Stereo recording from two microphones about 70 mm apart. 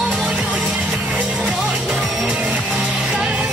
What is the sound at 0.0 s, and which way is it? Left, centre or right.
Music, centre.